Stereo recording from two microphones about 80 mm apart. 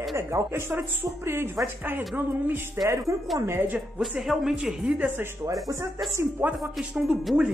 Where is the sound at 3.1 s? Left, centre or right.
Right.